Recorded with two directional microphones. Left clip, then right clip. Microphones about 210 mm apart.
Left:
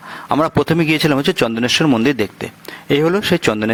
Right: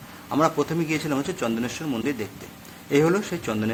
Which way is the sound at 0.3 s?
35° left (ahead or behind).